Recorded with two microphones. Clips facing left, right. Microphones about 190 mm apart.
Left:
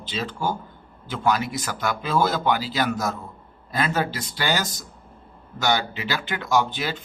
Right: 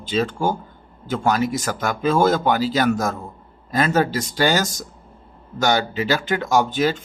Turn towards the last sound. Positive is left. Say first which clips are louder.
# right 5 dB
turn(degrees=-45)  # may be behind; listen again after turning